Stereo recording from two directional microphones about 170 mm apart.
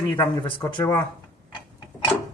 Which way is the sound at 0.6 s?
25° left (ahead or behind).